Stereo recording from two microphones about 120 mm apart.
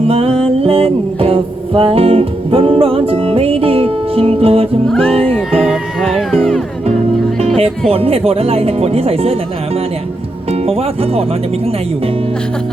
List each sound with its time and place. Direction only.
0.1 s music: 55° right (ahead or behind)
4.9 s speech: 5° left (ahead or behind)
5.2 s music: 5° left (ahead or behind)
7.6 s speech: 55° right (ahead or behind)
10.5 s speech: 60° right (ahead or behind)